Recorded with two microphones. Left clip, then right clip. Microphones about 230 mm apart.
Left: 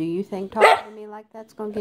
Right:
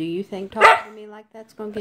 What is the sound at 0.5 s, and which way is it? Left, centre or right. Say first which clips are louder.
Speech: right 2 dB; centre.